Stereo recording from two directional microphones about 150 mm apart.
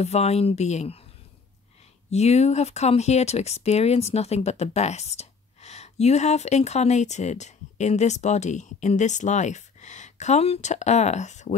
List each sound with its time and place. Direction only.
0.0 s speech: 45° left (ahead or behind)
2.0 s speech: 45° left (ahead or behind)